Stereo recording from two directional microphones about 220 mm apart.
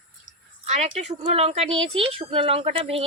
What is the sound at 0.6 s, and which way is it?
Speech, 30° right (ahead or behind).